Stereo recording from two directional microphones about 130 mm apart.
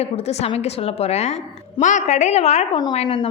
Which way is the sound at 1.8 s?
70° left (ahead or behind).